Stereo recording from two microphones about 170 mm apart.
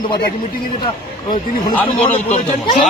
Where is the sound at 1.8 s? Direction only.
10° left (ahead or behind).